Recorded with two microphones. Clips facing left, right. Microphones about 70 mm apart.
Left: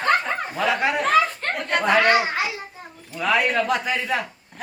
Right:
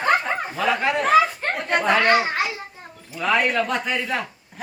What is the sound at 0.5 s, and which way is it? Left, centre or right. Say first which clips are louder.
Speech: even; centre.